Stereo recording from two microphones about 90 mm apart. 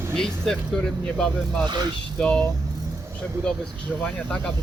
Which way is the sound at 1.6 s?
50° right (ahead or behind).